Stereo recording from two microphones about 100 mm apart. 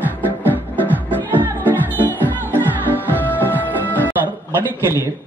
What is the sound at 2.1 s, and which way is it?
Music, 20° right (ahead or behind).